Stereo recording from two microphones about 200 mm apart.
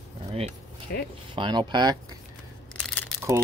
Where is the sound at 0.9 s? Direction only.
55° left (ahead or behind).